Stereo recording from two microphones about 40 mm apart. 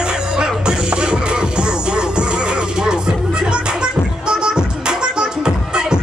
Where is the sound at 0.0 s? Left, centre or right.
Right.